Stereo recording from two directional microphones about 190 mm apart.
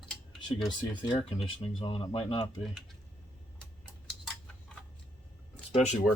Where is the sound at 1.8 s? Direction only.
25° left (ahead or behind).